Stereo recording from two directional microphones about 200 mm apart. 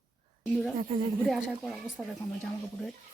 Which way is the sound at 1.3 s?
Centre (ahead or behind).